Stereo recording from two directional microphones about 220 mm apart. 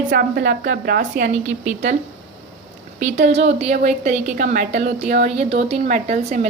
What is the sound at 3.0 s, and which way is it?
Speech, 30° right (ahead or behind).